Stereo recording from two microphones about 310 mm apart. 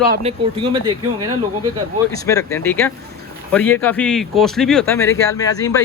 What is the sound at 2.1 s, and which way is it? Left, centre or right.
Speech, centre.